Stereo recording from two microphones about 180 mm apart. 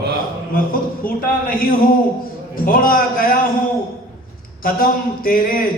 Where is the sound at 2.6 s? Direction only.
50° left (ahead or behind).